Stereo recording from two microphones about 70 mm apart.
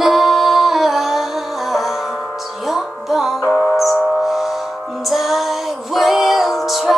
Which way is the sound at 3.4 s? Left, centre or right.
Left.